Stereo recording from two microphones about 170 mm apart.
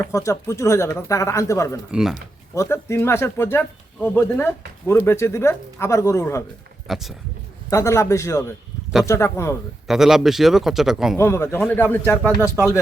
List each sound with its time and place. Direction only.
0.0 s speech: 15° left (ahead or behind)
1.9 s a man's voice: 5° right (ahead or behind)
2.6 s speech: 15° left (ahead or behind)
6.8 s speech: centre (ahead or behind)
7.7 s speech: 15° left (ahead or behind)
9.8 s a man's voice: centre (ahead or behind)
11.2 s speech: 15° left (ahead or behind)
12.4 s speech: 15° right (ahead or behind)